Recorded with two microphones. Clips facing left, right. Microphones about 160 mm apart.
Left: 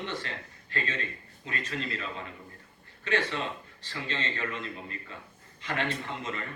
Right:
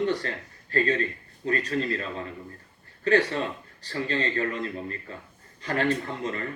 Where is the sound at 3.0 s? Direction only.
40° right (ahead or behind).